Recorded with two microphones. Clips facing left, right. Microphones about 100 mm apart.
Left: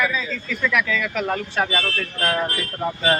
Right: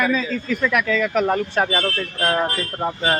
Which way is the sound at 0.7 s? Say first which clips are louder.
Right 4 dB; 35° right (ahead or behind).